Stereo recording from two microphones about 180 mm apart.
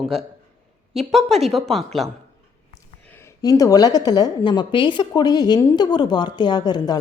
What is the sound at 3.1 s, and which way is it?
A woman's voice, 15° left (ahead or behind).